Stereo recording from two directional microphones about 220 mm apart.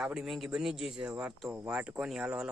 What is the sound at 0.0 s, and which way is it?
Speech, 5° right (ahead or behind).